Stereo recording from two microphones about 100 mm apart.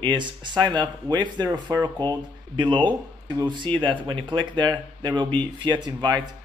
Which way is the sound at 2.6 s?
50° right (ahead or behind).